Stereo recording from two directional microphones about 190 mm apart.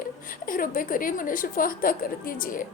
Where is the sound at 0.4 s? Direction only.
45° left (ahead or behind).